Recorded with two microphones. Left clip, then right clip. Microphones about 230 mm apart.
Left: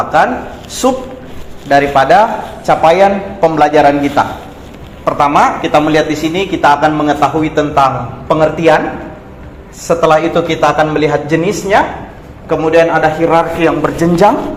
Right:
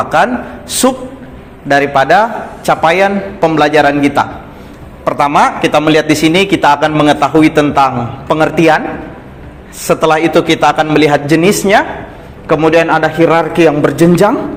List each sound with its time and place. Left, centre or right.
0.0 s a sound: right
0.8 s a man's voice: right
9.8 s a man's voice: right